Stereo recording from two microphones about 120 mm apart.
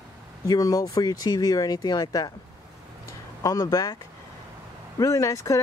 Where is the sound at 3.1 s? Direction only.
30° left (ahead or behind).